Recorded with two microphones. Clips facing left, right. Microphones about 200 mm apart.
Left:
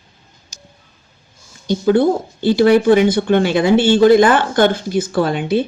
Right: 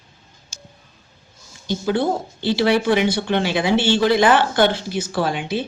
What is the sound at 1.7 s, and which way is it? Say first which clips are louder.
Speech: left 7 dB; 50° left (ahead or behind).